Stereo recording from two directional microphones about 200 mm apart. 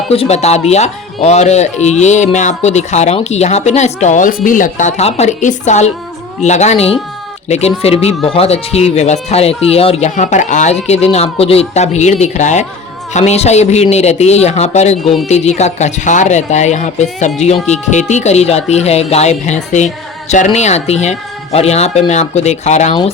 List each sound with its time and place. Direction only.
0.1 s speech: 30° left (ahead or behind)
15.0 s speech: centre (ahead or behind)
15.3 s speech: 35° left (ahead or behind)